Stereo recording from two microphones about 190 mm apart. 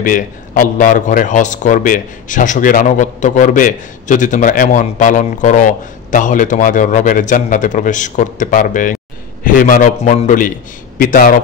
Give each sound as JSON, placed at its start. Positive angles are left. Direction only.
{"t": 0.0, "sound": "a man's voice", "side_deg": 45}